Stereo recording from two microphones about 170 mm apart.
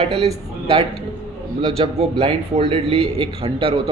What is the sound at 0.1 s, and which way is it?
Speech, 35° right (ahead or behind).